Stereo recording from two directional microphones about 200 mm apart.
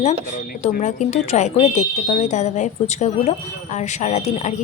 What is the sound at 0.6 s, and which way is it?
Speech, 35° left (ahead or behind).